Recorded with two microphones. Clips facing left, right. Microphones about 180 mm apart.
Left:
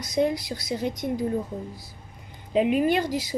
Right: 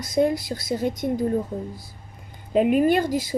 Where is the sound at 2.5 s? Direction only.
50° right (ahead or behind).